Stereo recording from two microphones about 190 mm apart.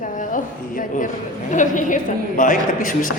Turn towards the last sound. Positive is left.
turn(degrees=45)  # may be behind; listen again after turning